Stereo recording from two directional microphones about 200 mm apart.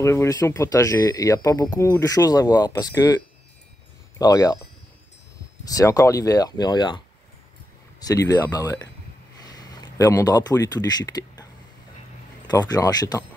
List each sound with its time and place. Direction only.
0.0 s speech: 15° left (ahead or behind)
4.2 s speech: 20° left (ahead or behind)
5.7 s speech: 15° left (ahead or behind)
8.0 s speech: 15° left (ahead or behind)
12.4 s speech: 20° left (ahead or behind)